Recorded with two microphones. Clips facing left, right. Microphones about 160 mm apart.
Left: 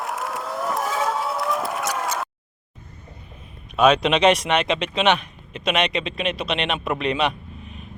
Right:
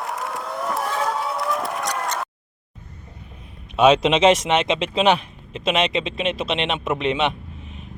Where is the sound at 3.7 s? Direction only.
25° right (ahead or behind).